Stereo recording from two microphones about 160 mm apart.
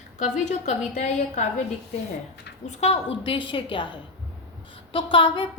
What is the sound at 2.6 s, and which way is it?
A woman's voice, 40° left (ahead or behind).